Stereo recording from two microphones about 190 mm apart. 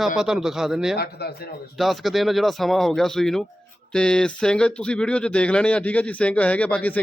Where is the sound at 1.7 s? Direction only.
Centre (ahead or behind).